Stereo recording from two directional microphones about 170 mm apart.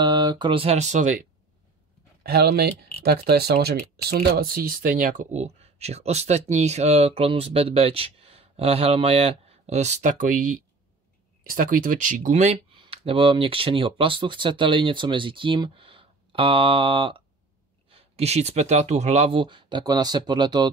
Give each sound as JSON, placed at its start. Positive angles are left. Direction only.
{"t": 0.0, "sound": "speech", "side_deg": -25}
{"t": 2.2, "sound": "speech", "side_deg": -70}